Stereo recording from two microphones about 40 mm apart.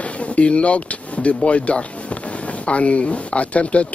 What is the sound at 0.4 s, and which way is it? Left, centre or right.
A woman's voice, left.